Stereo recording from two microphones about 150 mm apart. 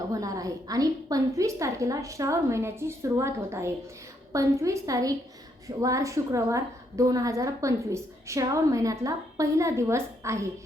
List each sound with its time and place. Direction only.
0.1 s a woman's voice: 25° right (ahead or behind)